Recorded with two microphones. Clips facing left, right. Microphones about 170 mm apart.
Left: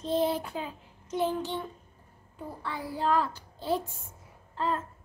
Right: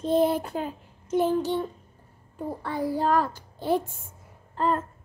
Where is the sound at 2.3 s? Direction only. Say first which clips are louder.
Right 7 dB; 45° right (ahead or behind).